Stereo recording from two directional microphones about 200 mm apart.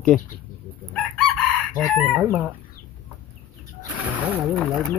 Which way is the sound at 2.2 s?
10° right (ahead or behind).